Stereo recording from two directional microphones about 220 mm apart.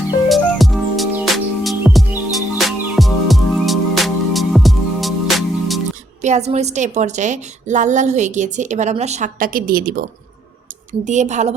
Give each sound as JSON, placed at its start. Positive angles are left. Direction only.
{"t": 0.3, "sound": "music", "side_deg": 0}
{"t": 6.2, "sound": "a woman's voice", "side_deg": -30}